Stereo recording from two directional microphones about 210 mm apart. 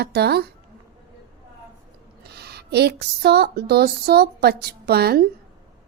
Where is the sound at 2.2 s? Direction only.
50° right (ahead or behind).